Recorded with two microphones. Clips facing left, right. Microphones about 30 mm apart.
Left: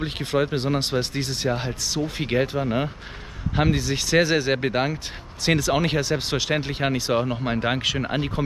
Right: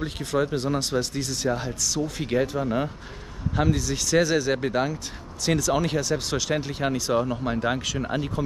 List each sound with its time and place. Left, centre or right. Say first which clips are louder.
0.0 s speech: left 2 dB; left
3.5 s speech: left 2 dB; left